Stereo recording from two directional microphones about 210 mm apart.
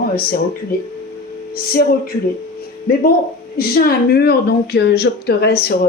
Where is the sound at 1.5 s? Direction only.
45° left (ahead or behind).